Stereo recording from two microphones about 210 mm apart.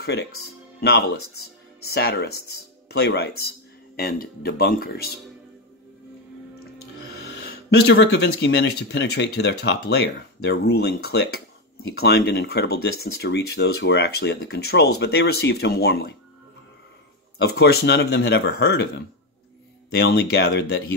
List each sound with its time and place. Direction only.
0.0 s speech: 50° left (ahead or behind)
7.2 s speech: 50° left (ahead or behind)
17.4 s speech: 50° left (ahead or behind)
19.9 s speech: 50° left (ahead or behind)